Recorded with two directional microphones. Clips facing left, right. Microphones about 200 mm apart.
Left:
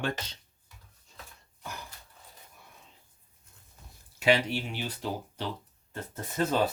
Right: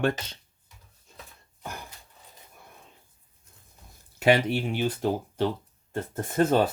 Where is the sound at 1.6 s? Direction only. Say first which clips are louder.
Right 3 dB; 50° right (ahead or behind).